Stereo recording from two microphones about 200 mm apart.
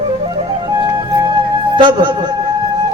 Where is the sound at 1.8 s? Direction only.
20° right (ahead or behind).